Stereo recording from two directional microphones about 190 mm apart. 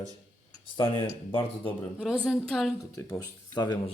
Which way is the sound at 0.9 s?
25° left (ahead or behind).